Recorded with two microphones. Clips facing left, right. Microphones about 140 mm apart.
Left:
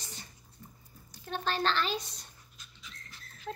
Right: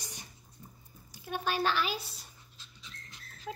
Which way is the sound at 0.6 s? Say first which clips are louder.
Left 1 dB; 20° right (ahead or behind).